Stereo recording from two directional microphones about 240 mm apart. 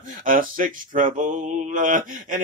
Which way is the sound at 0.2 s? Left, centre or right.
Right.